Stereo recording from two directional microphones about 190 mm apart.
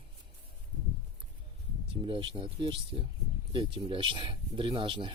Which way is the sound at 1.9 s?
25° right (ahead or behind).